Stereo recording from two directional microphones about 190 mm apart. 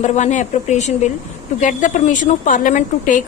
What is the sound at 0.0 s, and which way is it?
A woman's voice, 40° left (ahead or behind).